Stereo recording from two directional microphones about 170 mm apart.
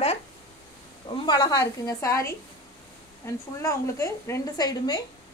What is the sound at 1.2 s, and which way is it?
A woman's voice, 25° left (ahead or behind).